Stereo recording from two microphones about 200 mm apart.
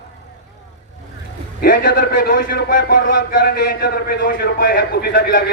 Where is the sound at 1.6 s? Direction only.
50° left (ahead or behind).